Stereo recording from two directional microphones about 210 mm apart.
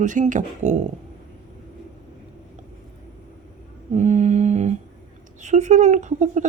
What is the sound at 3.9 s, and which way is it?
Humming, 35° right (ahead or behind).